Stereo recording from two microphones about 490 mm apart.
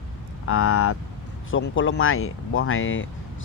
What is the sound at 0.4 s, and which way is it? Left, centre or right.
Speech, left.